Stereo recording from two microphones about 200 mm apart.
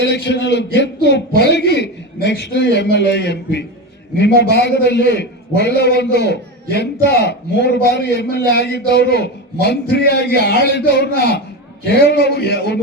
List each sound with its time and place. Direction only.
0.0 s a man's voice: 60° left (ahead or behind)